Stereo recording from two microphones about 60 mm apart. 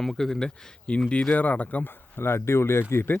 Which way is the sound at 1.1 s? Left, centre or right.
Left.